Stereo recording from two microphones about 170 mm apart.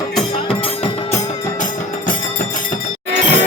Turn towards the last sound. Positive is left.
turn(degrees=-45)  # may be behind; listen again after turning